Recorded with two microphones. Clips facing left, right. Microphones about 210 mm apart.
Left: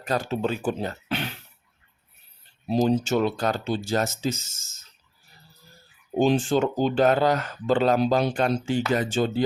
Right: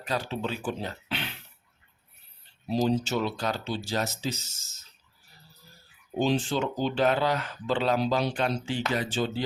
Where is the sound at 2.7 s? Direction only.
50° left (ahead or behind).